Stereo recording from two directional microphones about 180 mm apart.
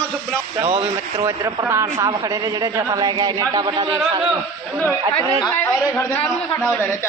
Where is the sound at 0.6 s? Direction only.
35° right (ahead or behind).